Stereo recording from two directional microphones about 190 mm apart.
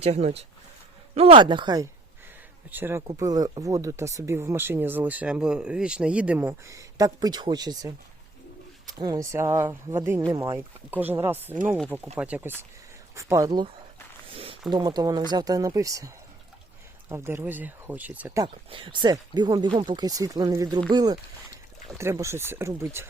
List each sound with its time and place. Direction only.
0.0 s speech: 35° right (ahead or behind)
2.6 s speech: 10° right (ahead or behind)
9.0 s speech: 20° right (ahead or behind)
14.3 s zipper: 30° right (ahead or behind)
14.7 s speech: 20° right (ahead or behind)
18.4 s speech: 25° right (ahead or behind)